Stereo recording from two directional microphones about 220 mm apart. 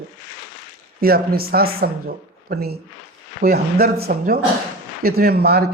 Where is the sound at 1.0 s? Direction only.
45° right (ahead or behind).